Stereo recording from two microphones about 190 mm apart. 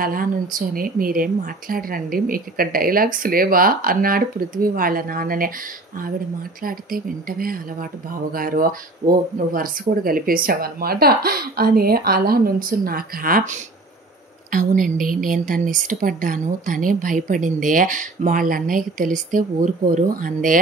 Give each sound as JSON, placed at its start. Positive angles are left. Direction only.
{"t": 0.0, "sound": "a woman's voice", "side_deg": -50}
{"t": 6.6, "sound": "a woman's voice", "side_deg": -50}